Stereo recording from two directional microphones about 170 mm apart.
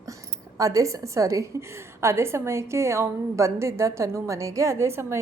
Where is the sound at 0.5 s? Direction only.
20° right (ahead or behind).